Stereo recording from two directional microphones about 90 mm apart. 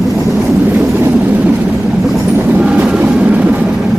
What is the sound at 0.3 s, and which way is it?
Vehicle, 5° right (ahead or behind).